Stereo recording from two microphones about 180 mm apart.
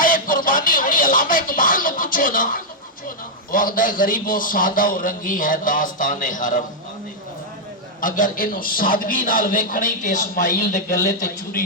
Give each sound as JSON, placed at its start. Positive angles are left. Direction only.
{"t": 0.0, "sound": "a sound", "side_deg": 50}
{"t": 3.5, "sound": "a man's voice", "side_deg": 50}
{"t": 8.0, "sound": "a man's voice", "side_deg": 50}